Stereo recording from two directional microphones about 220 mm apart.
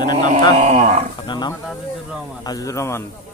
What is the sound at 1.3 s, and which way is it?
A man's voice, 20° left (ahead or behind).